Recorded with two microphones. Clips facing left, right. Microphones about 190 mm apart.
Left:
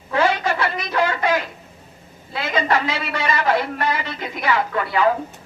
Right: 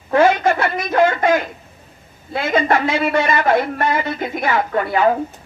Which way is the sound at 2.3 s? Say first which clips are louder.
Right 4 dB; 45° right (ahead or behind).